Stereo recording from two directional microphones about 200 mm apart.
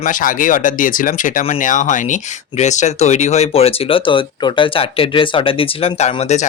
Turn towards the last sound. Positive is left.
turn(degrees=30)  # may be behind; listen again after turning